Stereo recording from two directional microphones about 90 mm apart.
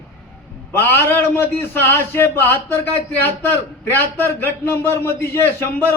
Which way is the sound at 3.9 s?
25° left (ahead or behind).